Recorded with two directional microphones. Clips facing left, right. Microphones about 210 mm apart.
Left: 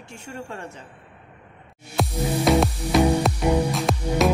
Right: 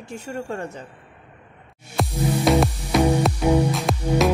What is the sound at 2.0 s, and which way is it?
Music, centre (ahead or behind).